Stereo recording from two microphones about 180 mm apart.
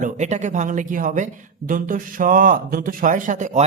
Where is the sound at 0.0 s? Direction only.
40° right (ahead or behind).